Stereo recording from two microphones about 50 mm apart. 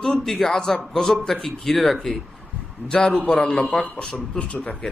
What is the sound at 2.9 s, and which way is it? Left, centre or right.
A man's voice, centre.